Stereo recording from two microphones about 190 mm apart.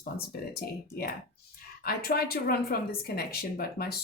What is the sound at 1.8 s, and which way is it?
Speech, 55° left (ahead or behind).